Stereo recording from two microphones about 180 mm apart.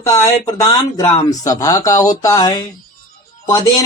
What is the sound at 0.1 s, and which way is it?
Speech, 20° left (ahead or behind).